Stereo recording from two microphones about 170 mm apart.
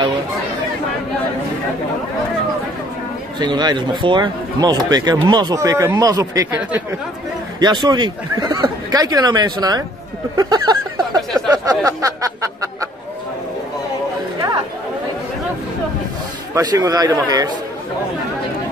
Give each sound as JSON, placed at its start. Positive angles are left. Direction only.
{"t": 3.3, "sound": "speech", "side_deg": -25}
{"t": 7.8, "sound": "speech", "side_deg": -25}
{"t": 10.3, "sound": "a sound", "side_deg": -25}
{"t": 11.8, "sound": "speech", "side_deg": -20}
{"t": 16.5, "sound": "speech", "side_deg": -20}